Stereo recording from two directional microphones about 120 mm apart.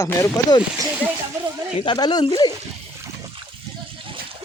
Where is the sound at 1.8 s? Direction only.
40° left (ahead or behind).